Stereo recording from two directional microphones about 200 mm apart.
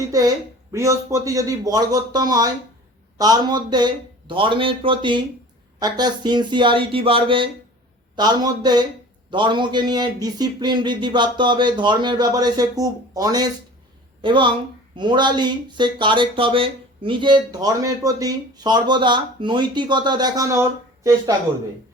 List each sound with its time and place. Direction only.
0.7 s a man's voice: 15° right (ahead or behind)